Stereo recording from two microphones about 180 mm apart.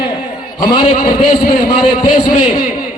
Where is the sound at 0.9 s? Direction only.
55° left (ahead or behind).